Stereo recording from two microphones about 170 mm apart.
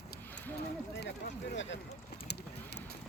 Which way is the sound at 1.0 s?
80° left.